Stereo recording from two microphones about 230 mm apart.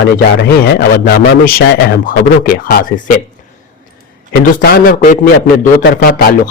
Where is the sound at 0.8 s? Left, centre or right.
Left.